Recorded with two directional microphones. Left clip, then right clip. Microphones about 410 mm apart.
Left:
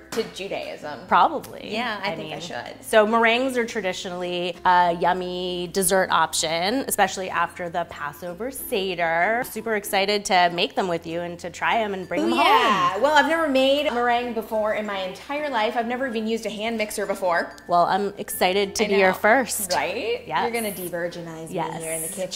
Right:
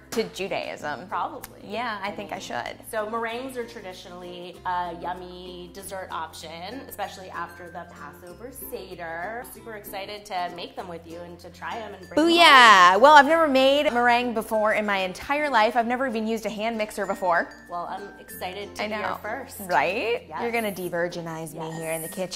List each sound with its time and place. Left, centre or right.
0.1 s a woman's voice: right
1.1 s a woman's voice: left
1.7 s a woman's voice: centre
2.9 s a woman's voice: left
12.2 s speech: right
13.1 s a woman's voice: centre
17.6 s a woman's voice: left
19.7 s a woman's voice: right